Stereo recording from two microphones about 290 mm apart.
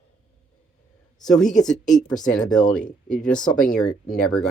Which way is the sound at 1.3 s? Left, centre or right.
Centre.